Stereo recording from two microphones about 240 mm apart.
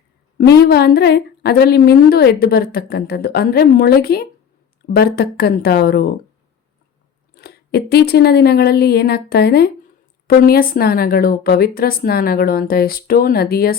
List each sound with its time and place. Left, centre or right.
0.3 s a woman's voice: left
7.3 s a woman's voice: left